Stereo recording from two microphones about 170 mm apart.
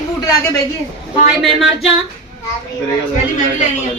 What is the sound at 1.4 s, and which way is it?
Speech, centre (ahead or behind).